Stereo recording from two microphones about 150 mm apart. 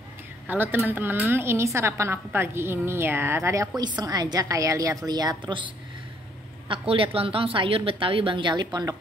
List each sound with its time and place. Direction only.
0.5 s a woman's voice: 15° right (ahead or behind); by 5.7 s 35° right (ahead or behind)
6.7 s a woman's voice: 35° right (ahead or behind)